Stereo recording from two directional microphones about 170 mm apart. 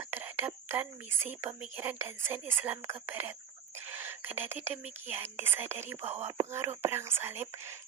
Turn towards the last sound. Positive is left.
turn(degrees=-15)  # may be behind; listen again after turning